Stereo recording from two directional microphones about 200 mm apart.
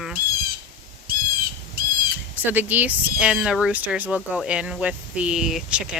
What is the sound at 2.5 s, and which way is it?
Speech, 10° right (ahead or behind).